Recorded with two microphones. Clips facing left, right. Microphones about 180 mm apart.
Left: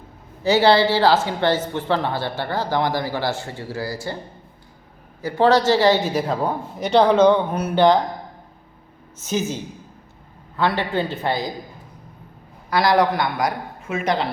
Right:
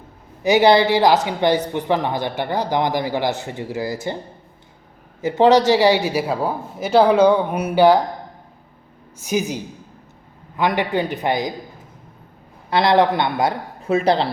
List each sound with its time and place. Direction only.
0.4 s a woman's voice: 15° right (ahead or behind)
5.2 s a woman's voice: 20° right (ahead or behind)
9.2 s a woman's voice: 15° right (ahead or behind)
10.6 s a woman's voice: 15° right (ahead or behind)
12.7 s a woman's voice: 25° right (ahead or behind)